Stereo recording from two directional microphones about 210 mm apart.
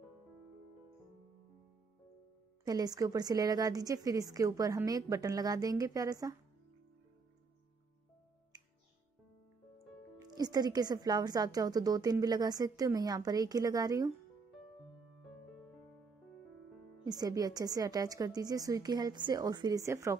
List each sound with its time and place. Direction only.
2.6 s a woman's voice: 20° right (ahead or behind)
8.5 s music: 20° right (ahead or behind)
10.3 s a woman's voice: 20° right (ahead or behind)
17.0 s a woman's voice: 20° right (ahead or behind)